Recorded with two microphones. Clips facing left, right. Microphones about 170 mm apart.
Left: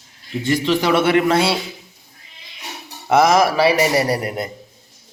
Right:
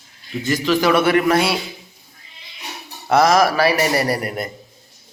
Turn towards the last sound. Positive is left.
turn(degrees=15)  # may be behind; listen again after turning